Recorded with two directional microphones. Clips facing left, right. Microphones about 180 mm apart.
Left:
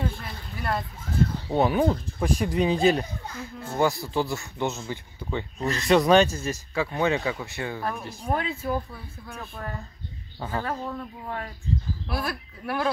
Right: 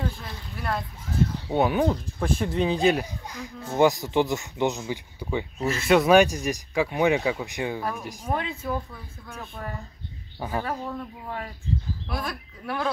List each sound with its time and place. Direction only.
0.1 s a sound: centre (ahead or behind)
1.5 s speech: centre (ahead or behind)
3.3 s speech: 15° right (ahead or behind)
8.3 s speech: centre (ahead or behind)
9.6 s speech: 15° right (ahead or behind)
12.1 s speech: 5° left (ahead or behind)